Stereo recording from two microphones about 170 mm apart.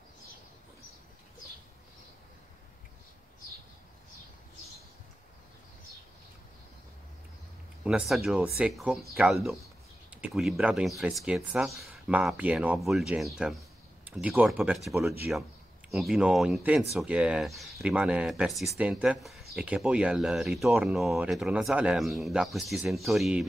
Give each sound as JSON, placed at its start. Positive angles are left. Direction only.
{"t": 7.8, "sound": "speech", "side_deg": -5}